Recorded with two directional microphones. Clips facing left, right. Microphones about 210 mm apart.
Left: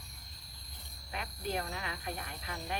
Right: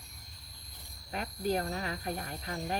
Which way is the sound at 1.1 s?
40° right (ahead or behind).